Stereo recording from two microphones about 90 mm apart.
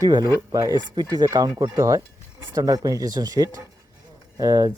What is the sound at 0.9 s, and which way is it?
Speech, 50° right (ahead or behind).